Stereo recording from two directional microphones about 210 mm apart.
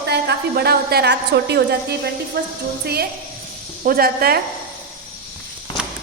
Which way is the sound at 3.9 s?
45° right (ahead or behind).